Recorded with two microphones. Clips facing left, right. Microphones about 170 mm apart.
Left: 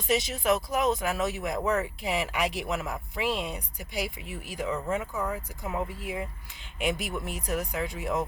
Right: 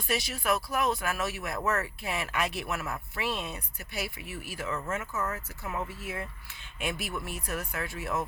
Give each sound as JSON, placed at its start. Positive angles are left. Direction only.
{"t": 0.1, "sound": "speech", "side_deg": 20}